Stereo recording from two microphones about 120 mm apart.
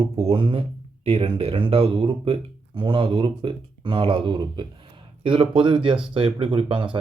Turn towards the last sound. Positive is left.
turn(degrees=-45)  # may be behind; listen again after turning